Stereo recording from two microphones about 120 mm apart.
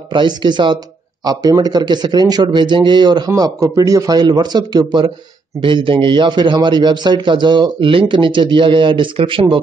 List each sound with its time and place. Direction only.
0.1 s a man's voice: 40° right (ahead or behind)